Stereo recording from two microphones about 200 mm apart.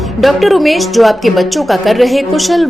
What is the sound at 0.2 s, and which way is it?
A woman's voice, centre (ahead or behind).